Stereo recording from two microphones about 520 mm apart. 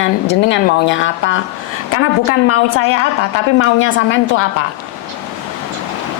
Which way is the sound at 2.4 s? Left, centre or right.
Left.